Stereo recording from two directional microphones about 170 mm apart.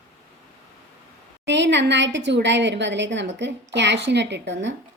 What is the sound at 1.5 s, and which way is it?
A woman's voice, 90° right.